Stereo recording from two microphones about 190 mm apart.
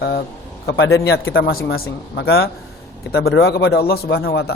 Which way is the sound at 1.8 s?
55° left (ahead or behind).